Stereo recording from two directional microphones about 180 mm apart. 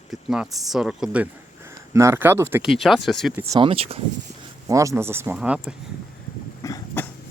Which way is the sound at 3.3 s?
15° right (ahead or behind).